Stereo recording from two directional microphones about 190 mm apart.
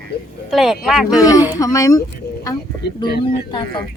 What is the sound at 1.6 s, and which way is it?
Speech, 15° left (ahead or behind).